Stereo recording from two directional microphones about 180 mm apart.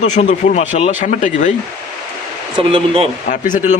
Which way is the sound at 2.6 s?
30° right (ahead or behind).